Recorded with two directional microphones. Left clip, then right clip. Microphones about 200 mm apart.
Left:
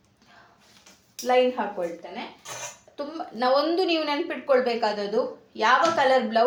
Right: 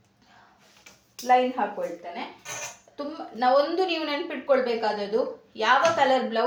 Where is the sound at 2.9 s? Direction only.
40° left (ahead or behind).